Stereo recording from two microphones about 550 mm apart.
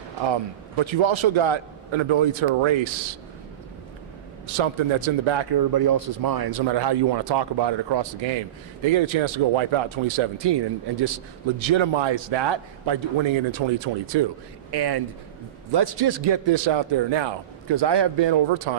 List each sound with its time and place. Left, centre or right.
0.8 s a man's voice: right
4.5 s a man's voice: right
5.5 s a man's voice: right
11.7 s a man's voice: right